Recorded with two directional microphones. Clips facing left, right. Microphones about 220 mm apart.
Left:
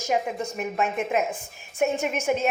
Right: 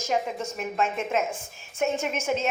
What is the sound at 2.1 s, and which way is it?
Speech, 15° left (ahead or behind).